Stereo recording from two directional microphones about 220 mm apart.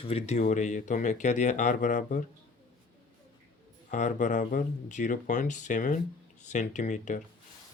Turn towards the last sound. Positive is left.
turn(degrees=35)  # may be behind; listen again after turning